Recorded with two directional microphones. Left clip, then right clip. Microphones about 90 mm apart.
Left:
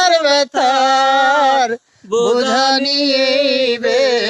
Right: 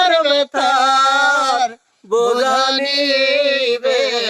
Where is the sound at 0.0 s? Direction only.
25° left (ahead or behind).